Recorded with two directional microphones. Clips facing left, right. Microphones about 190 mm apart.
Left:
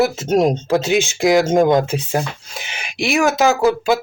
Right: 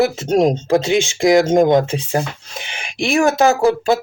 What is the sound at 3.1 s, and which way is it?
Speech, 30° right (ahead or behind).